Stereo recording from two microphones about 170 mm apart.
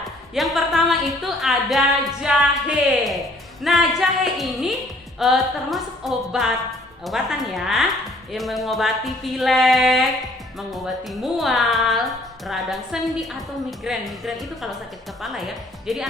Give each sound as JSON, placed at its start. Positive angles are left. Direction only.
{"t": 0.3, "sound": "a sound", "side_deg": 0}
{"t": 3.6, "sound": "speech", "side_deg": 0}
{"t": 11.1, "sound": "speech", "side_deg": 0}